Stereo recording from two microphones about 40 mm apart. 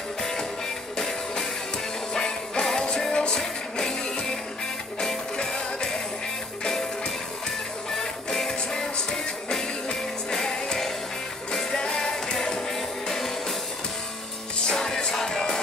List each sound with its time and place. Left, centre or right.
0.9 s music: centre
7.9 s music: centre
14.7 s music: centre